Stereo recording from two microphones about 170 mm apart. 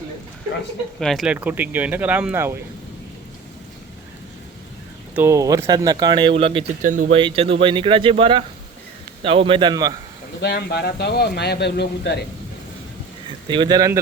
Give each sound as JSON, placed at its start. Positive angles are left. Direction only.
{"t": 0.9, "sound": "speech", "side_deg": 0}
{"t": 5.1, "sound": "speech", "side_deg": -15}
{"t": 6.8, "sound": "speech", "side_deg": -50}
{"t": 7.2, "sound": "speech", "side_deg": -30}
{"t": 10.4, "sound": "speech", "side_deg": 75}
{"t": 13.5, "sound": "speech", "side_deg": -25}